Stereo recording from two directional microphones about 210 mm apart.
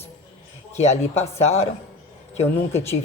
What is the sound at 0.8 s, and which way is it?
Speech, 30° left (ahead or behind).